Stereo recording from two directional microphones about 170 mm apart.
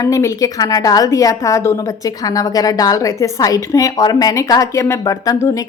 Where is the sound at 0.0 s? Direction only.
20° left (ahead or behind).